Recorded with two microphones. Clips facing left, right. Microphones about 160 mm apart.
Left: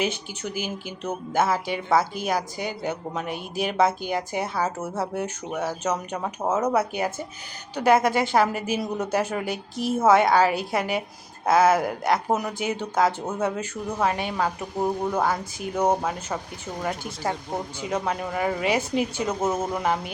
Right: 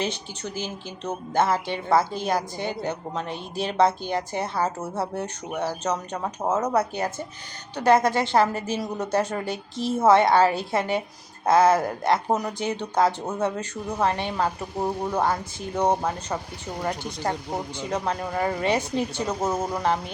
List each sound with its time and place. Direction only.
0.0 s speech: 10° left (ahead or behind)
9.7 s a woman's voice: 25° right (ahead or behind)
10.0 s speech: 5° left (ahead or behind)
14.3 s speech: 5° right (ahead or behind)
15.8 s speech: 5° left (ahead or behind)